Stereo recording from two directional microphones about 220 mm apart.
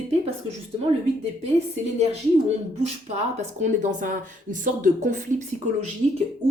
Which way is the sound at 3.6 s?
35° right (ahead or behind).